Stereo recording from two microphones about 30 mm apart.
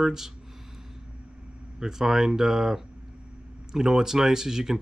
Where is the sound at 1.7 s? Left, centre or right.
Centre.